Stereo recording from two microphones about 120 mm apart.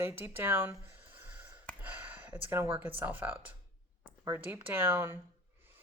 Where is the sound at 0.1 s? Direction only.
20° right (ahead or behind).